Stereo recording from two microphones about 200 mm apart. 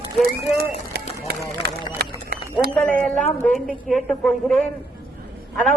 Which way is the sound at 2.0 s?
50° right (ahead or behind).